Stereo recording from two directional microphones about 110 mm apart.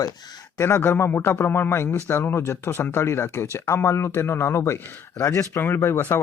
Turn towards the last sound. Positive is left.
turn(degrees=20)  # may be behind; listen again after turning